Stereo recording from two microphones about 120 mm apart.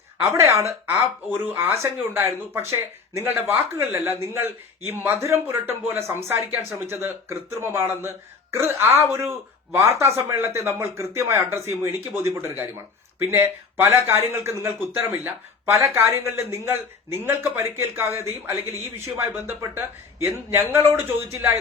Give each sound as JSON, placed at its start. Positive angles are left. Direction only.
{"t": 0.3, "sound": "speech", "side_deg": -25}